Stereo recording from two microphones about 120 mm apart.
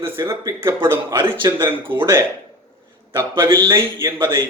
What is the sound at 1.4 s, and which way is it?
Speech, 30° right (ahead or behind).